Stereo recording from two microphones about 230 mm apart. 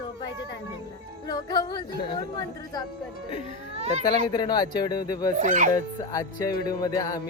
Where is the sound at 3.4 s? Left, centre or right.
Right.